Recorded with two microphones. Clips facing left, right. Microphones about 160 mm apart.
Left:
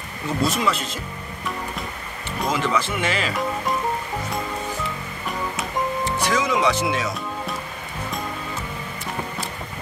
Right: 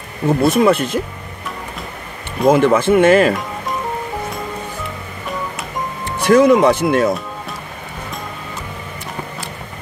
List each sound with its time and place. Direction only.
0.3 s speech: 55° right (ahead or behind)
2.4 s speech: 50° right (ahead or behind)
6.0 s speech: 55° right (ahead or behind)